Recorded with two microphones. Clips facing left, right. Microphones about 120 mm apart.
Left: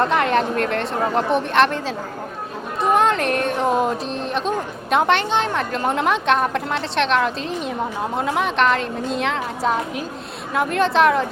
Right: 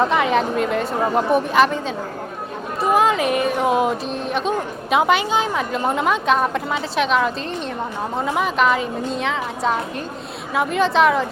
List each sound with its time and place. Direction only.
0.0 s speech: centre (ahead or behind)
2.8 s speech: 5° right (ahead or behind)